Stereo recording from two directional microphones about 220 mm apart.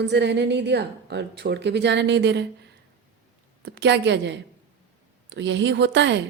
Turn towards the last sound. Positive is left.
turn(degrees=-55)  # may be behind; listen again after turning